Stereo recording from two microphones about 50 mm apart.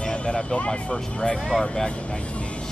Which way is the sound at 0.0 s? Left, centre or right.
Left.